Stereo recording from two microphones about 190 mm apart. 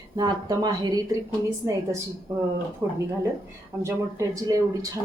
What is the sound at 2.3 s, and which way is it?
Speech, 15° right (ahead or behind).